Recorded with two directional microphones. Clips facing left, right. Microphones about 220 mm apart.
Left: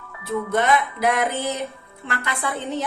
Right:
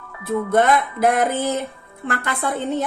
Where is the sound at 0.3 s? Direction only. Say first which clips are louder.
Right 3 dB; 50° right (ahead or behind).